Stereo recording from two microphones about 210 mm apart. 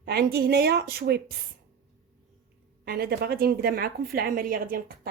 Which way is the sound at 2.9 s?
50° right (ahead or behind).